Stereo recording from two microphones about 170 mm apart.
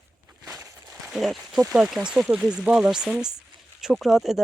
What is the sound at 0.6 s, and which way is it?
Walk, 15° right (ahead or behind).